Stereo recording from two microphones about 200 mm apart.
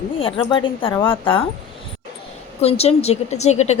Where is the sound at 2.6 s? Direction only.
30° left (ahead or behind).